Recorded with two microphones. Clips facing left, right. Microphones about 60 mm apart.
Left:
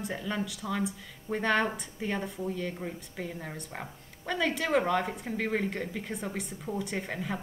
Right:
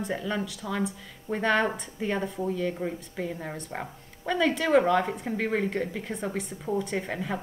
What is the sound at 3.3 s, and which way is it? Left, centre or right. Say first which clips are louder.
Speech: right 5 dB; centre.